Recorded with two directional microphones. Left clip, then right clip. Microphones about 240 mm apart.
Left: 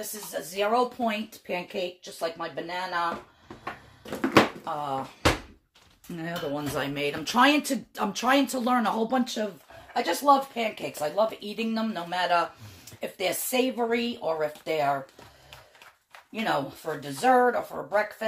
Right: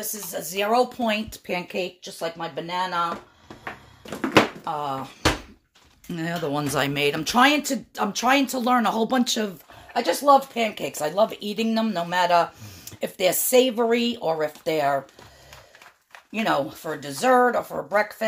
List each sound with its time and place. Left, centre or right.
0.1 s speech: right
4.7 s speech: right
6.1 s speech: right
16.3 s speech: right